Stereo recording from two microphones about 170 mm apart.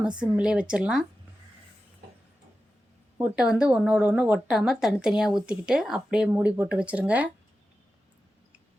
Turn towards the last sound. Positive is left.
turn(degrees=-10)  # may be behind; listen again after turning